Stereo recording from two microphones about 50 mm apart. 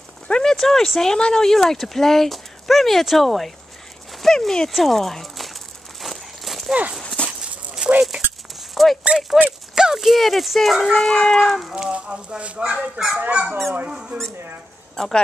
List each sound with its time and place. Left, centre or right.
0.3 s speech: centre
4.2 s crumpling: centre
6.7 s speech: right
7.0 s a sound: centre
7.8 s dog: right
8.5 s a sound: centre
9.4 s speech: centre
11.7 s speech: centre
15.0 s speech: centre